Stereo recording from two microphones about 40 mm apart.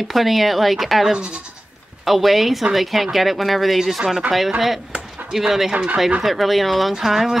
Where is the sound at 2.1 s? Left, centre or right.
Centre.